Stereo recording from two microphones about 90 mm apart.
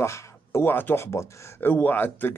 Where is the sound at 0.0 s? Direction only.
30° left (ahead or behind).